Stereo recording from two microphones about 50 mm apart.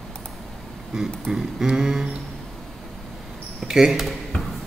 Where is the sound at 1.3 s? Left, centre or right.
Centre.